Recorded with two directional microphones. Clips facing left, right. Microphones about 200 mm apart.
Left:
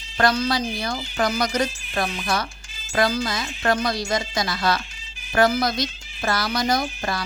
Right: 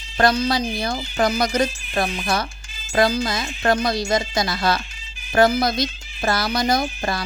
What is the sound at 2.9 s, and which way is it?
Speech, 25° right (ahead or behind).